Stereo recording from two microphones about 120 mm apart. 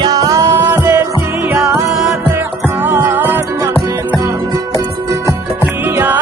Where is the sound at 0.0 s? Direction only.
30° right (ahead or behind).